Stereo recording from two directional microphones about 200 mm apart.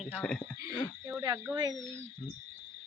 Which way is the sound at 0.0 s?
5° left (ahead or behind).